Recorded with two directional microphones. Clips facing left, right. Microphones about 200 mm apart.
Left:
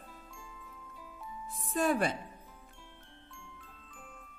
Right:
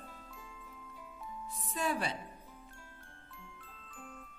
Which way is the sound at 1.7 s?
50° left (ahead or behind).